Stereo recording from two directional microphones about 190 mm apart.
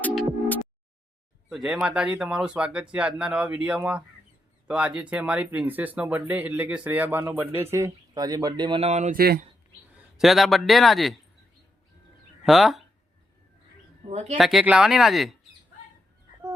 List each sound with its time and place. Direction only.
0.0 s music: 10° left (ahead or behind)
1.5 s speech: centre (ahead or behind); by 9.1 s 35° right (ahead or behind)
9.1 s speech: 55° right (ahead or behind)
10.2 s speech: centre (ahead or behind)
12.5 s speech: centre (ahead or behind)
14.1 s speech: 35° right (ahead or behind)
14.3 s speech: centre (ahead or behind)